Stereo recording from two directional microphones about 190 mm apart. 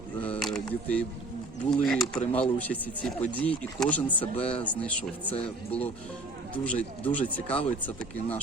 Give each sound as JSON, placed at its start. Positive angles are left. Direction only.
{"t": 0.3, "sound": "a sound", "side_deg": 5}
{"t": 0.7, "sound": "speech", "side_deg": 5}
{"t": 4.4, "sound": "speech", "side_deg": 30}
{"t": 4.6, "sound": "speech", "side_deg": 5}